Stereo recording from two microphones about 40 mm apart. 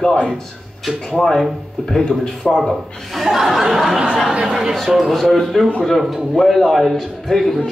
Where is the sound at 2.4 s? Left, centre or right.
Centre.